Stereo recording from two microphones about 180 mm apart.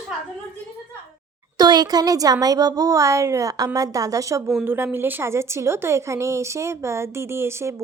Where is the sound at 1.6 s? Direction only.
20° right (ahead or behind).